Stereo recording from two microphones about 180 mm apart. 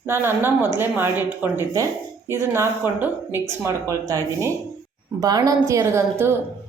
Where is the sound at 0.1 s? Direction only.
15° right (ahead or behind).